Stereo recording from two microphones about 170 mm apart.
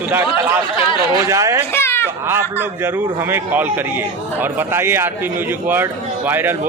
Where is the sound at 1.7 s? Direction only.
15° left (ahead or behind).